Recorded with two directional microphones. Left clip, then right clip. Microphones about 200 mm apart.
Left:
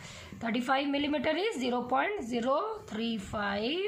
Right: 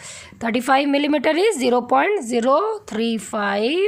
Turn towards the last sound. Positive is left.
turn(degrees=-60)  # may be behind; listen again after turning